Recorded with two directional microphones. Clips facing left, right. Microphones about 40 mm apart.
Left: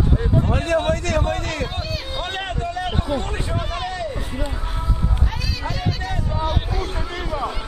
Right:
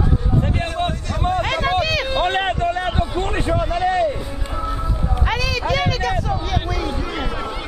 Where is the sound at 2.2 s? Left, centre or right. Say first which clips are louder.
Right 6 dB; right.